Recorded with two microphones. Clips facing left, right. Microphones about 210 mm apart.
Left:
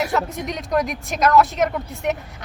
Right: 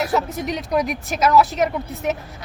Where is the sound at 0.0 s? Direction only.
Centre (ahead or behind).